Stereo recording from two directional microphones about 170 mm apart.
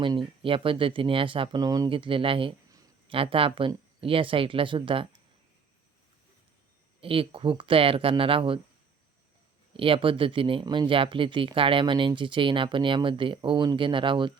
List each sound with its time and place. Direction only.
0.4 s speech: 30° right (ahead or behind)
7.0 s speech: 30° right (ahead or behind)
9.7 s speech: 30° right (ahead or behind)